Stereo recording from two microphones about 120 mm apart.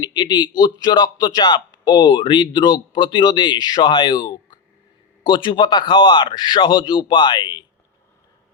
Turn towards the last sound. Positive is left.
turn(degrees=40)  # may be behind; listen again after turning